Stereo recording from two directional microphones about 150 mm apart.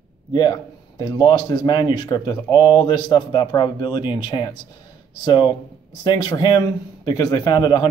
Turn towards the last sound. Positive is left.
turn(degrees=30)  # may be behind; listen again after turning